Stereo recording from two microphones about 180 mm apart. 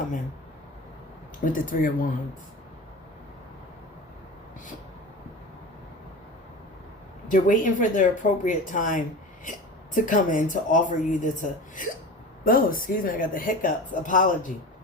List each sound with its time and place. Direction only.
1.5 s a woman's voice: 50° left (ahead or behind)
7.3 s a woman's voice: 45° left (ahead or behind)